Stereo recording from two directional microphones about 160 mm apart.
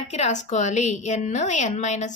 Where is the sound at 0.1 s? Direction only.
45° left (ahead or behind).